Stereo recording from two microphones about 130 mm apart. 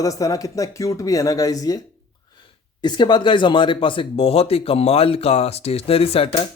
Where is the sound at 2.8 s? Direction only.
35° left (ahead or behind).